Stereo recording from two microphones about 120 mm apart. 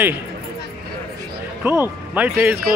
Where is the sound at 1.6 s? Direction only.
20° right (ahead or behind).